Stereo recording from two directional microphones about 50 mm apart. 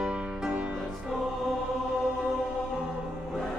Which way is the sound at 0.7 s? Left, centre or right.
Centre.